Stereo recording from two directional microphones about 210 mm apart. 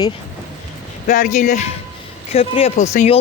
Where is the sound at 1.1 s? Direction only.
35° left (ahead or behind).